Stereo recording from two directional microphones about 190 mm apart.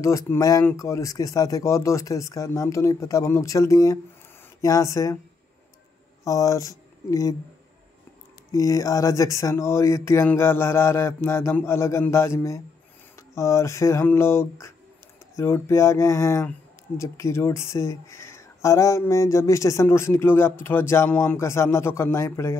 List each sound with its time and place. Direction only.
0.3 s speech: 15° left (ahead or behind)
6.2 s speech: 15° left (ahead or behind)
8.5 s speech: 20° left (ahead or behind)